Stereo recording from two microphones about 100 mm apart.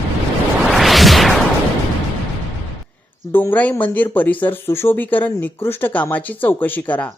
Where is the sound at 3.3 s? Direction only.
20° left (ahead or behind).